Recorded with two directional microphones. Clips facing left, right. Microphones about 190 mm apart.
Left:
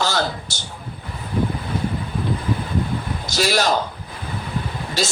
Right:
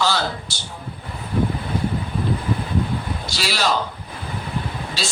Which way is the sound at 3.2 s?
45° left (ahead or behind).